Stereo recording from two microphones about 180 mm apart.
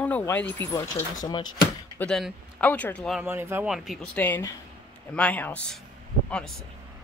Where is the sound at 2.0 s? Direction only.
5° left (ahead or behind).